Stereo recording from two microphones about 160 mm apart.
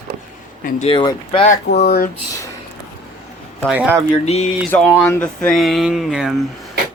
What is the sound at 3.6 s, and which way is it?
Speech, 5° right (ahead or behind).